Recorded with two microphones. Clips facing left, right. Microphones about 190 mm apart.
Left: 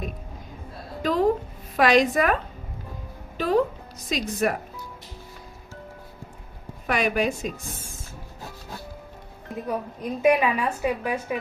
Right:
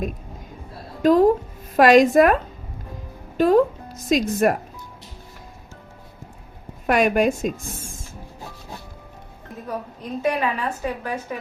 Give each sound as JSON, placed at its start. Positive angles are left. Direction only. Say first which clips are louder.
{"t": 1.0, "sound": "a woman's voice", "louder": "right 7 dB", "side_deg": -45}
{"t": 3.3, "sound": "speech", "louder": "right 6 dB", "side_deg": -45}
{"t": 6.8, "sound": "a woman's voice", "louder": "right 6 dB", "side_deg": -50}
{"t": 9.6, "sound": "a woman's voice", "louder": "left 1 dB", "side_deg": 10}